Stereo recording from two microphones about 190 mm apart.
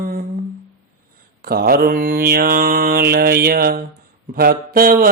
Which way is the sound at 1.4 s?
55° right (ahead or behind).